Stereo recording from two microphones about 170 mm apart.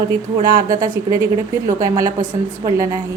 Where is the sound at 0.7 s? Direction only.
20° right (ahead or behind).